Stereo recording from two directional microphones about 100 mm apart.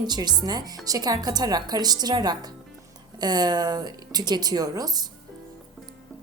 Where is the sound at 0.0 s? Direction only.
45° right (ahead or behind).